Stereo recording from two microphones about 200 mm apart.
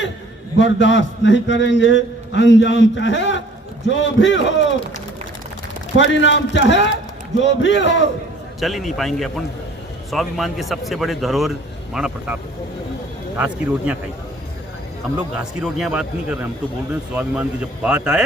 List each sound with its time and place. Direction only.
0.6 s a man's voice: 65° left (ahead or behind)
6.0 s a man's voice: 65° left (ahead or behind)
8.6 s speech: centre (ahead or behind)
15.6 s speech: 5° right (ahead or behind)